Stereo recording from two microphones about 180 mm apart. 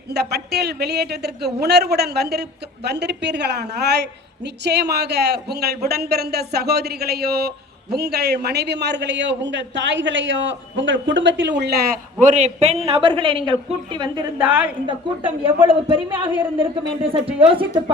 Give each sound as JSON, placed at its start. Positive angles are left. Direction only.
{"t": 0.1, "sound": "a woman's voice", "side_deg": -65}
{"t": 14.3, "sound": "a woman's voice", "side_deg": -10}
{"t": 15.6, "sound": "speech", "side_deg": -30}